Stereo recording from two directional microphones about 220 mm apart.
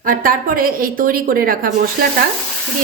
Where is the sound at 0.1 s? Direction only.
40° right (ahead or behind).